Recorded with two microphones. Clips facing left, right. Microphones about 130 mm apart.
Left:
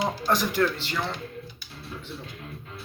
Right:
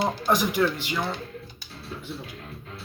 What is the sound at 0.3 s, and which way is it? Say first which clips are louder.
Speech: right 1 dB; 15° right (ahead or behind).